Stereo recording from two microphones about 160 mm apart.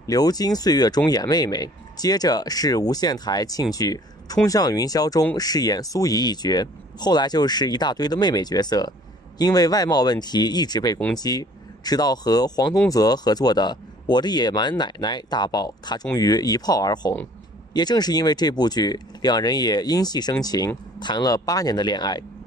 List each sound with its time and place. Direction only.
0.0 s speech: 25° left (ahead or behind)